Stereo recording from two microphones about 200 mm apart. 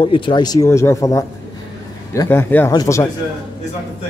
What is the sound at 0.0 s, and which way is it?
A man's voice, 25° left (ahead or behind).